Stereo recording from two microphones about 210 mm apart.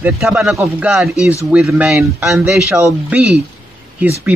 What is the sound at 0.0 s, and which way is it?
A man's voice, 5° right (ahead or behind).